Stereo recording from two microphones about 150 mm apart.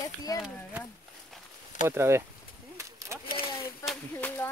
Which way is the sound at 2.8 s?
20° right (ahead or behind).